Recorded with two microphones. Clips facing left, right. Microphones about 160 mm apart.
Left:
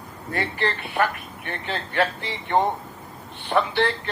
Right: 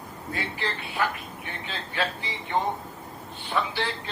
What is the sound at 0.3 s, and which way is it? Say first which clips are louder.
A man's voice: left 7 dB; 60° left (ahead or behind).